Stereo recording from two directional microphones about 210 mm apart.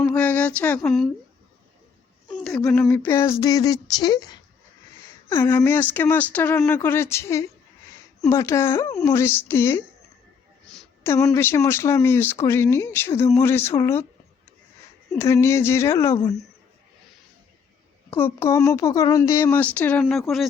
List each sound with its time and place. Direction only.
0.0 s speech: 5° left (ahead or behind)
2.2 s a sound: centre (ahead or behind)
2.6 s speech: 5° left (ahead or behind)
15.2 s speech: 15° left (ahead or behind)
18.2 s speech: 10° left (ahead or behind)